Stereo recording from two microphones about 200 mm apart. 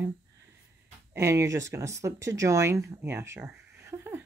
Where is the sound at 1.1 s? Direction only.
15° right (ahead or behind).